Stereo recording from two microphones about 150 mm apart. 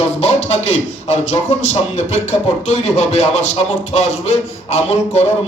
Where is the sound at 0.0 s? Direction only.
45° left (ahead or behind).